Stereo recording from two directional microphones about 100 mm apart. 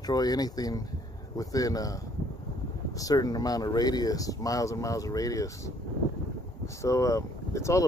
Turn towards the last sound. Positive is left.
turn(degrees=30)  # may be behind; listen again after turning